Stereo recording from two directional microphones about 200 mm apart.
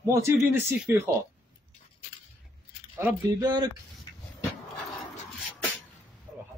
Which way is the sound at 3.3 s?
20° right (ahead or behind).